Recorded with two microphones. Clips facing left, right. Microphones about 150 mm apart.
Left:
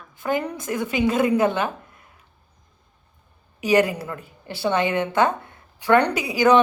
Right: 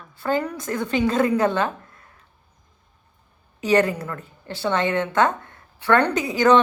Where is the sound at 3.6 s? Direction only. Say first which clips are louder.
Even; 10° left (ahead or behind).